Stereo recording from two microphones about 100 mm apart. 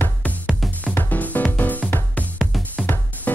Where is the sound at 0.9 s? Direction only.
15° left (ahead or behind).